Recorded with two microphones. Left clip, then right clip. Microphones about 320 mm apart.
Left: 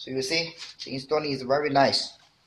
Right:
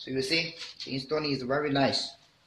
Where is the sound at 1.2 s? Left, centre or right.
Centre.